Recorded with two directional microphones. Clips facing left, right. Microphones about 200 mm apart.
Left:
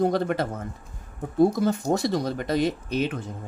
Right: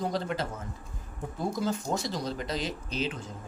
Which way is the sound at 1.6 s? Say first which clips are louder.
Left 7 dB; 60° left (ahead or behind).